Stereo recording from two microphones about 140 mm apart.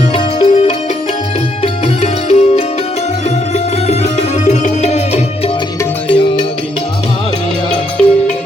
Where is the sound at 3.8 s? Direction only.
50° left (ahead or behind).